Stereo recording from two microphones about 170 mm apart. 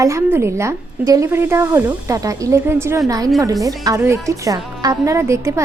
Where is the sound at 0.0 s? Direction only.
15° right (ahead or behind).